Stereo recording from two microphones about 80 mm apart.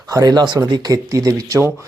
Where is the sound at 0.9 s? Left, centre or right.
Right.